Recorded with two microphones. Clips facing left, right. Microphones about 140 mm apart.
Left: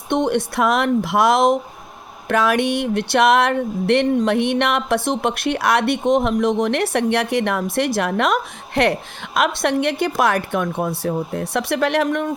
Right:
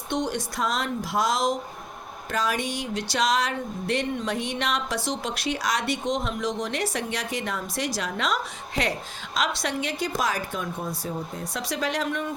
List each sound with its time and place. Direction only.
0.1 s a woman's voice: 60° left (ahead or behind)